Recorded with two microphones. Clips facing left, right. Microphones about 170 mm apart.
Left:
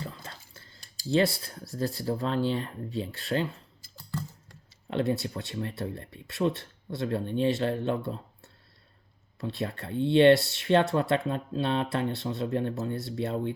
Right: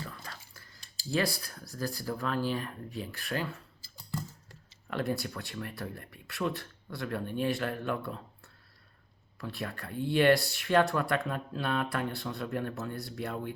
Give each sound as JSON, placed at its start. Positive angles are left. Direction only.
{"t": 0.0, "sound": "whispering", "side_deg": 25}
{"t": 1.1, "sound": "speech", "side_deg": 25}
{"t": 4.9, "sound": "speech", "side_deg": 25}
{"t": 9.4, "sound": "speech", "side_deg": 25}